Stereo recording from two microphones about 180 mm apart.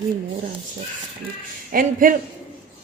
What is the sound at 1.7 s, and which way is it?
Speech, 50° right (ahead or behind).